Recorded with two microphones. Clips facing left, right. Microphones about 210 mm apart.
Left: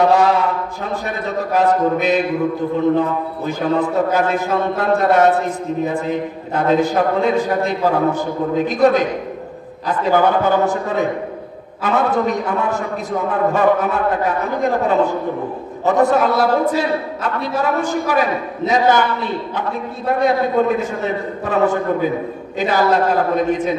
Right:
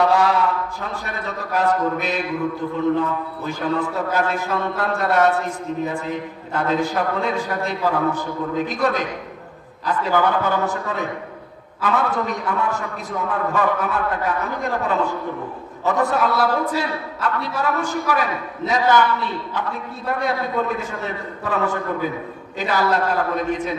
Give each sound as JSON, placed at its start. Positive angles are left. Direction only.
{"t": 0.0, "sound": "a sound", "side_deg": 20}
{"t": 1.0, "sound": "a man's voice", "side_deg": 20}
{"t": 10.0, "sound": "a man's voice", "side_deg": 20}
{"t": 11.8, "sound": "a man's voice", "side_deg": 25}